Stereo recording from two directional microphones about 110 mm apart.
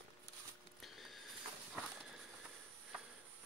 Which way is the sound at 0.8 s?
Centre (ahead or behind).